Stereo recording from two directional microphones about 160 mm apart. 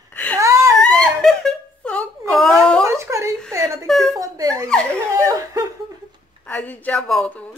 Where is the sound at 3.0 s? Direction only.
20° right (ahead or behind).